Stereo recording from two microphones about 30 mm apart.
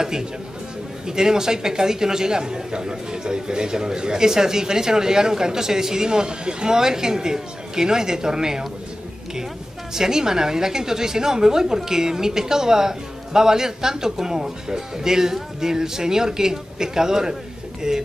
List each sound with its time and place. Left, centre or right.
0.0 s a man's voice: right
9.9 s a man's voice: centre